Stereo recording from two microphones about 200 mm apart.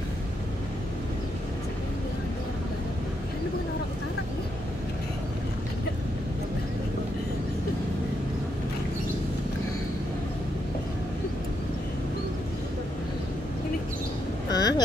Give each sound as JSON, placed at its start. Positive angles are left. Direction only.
{"t": 14.5, "sound": "vehicle", "side_deg": 20}